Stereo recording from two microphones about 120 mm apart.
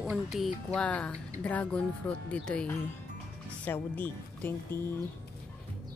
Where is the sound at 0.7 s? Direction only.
10° left (ahead or behind).